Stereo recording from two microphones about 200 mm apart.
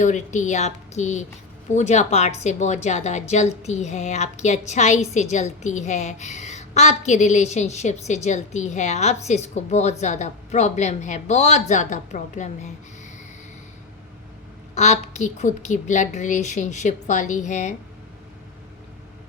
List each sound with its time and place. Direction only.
0.0 s a woman's voice: 35° left (ahead or behind)
14.8 s a woman's voice: 35° left (ahead or behind)